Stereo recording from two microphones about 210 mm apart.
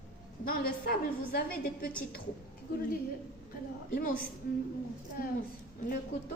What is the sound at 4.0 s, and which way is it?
Speech, 40° left (ahead or behind).